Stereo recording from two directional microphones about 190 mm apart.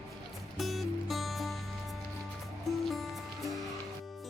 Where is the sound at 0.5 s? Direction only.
Centre (ahead or behind).